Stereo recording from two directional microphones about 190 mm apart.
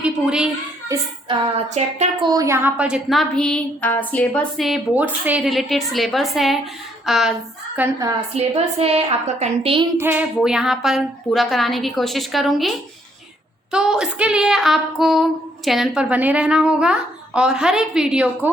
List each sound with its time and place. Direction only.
0.0 s a child's voice: 5° right (ahead or behind)
0.9 s child singing: 25° right (ahead or behind)
2.2 s speech: 20° right (ahead or behind); by 7.3 s centre (ahead or behind)
7.8 s a woman's voice: 20° right (ahead or behind)
8.4 s a woman's voice: 30° right (ahead or behind)
10.0 s speech: 10° right (ahead or behind)